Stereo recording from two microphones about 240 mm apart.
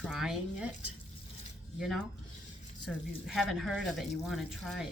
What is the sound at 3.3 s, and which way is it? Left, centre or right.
Speech, centre.